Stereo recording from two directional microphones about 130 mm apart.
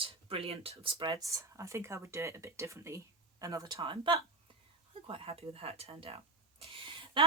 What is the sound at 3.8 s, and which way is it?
Speech, 40° right (ahead or behind).